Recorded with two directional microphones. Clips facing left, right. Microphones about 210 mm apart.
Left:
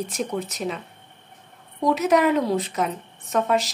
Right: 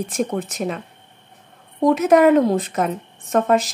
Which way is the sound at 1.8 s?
50° right (ahead or behind).